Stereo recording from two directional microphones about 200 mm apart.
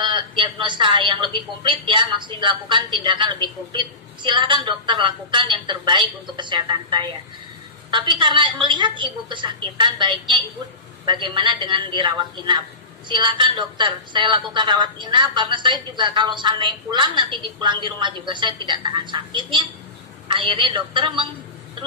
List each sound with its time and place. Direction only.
0.0 s speech: 25° right (ahead or behind)